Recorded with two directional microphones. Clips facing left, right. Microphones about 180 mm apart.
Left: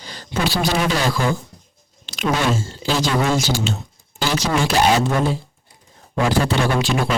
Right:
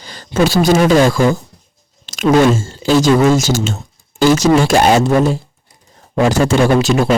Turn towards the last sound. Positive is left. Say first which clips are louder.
# right 8 dB
turn(degrees=-40)  # may be behind; listen again after turning